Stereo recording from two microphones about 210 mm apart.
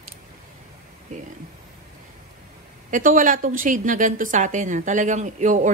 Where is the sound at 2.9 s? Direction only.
40° right (ahead or behind).